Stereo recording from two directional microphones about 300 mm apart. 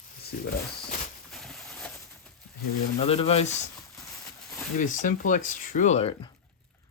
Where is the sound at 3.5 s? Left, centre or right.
Centre.